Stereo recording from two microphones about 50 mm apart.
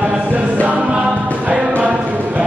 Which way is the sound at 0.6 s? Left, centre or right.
Right.